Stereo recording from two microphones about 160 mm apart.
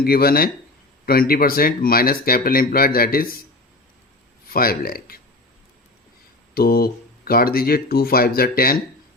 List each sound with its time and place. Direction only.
0.0 s speech: 70° left (ahead or behind)
4.5 s speech: 65° left (ahead or behind)
6.5 s speech: 70° left (ahead or behind)